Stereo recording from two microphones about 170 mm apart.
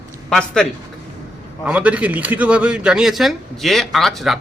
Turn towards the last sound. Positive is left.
turn(degrees=0)  # may be behind; listen again after turning